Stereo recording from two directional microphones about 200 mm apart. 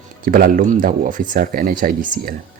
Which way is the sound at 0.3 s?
45° right (ahead or behind).